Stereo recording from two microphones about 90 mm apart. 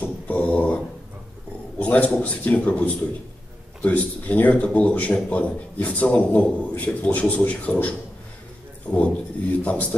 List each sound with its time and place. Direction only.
0.0 s a sound: 15° left (ahead or behind)
1.8 s a man's voice: 15° left (ahead or behind)
8.9 s a man's voice: 15° left (ahead or behind)